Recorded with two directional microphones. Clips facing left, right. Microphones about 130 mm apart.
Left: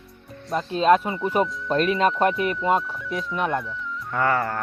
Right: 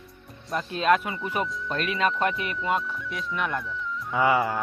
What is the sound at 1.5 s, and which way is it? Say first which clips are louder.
Speech: left 1 dB; centre (ahead or behind).